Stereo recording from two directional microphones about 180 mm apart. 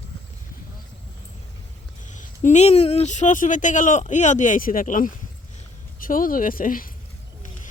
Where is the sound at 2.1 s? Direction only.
45° left (ahead or behind).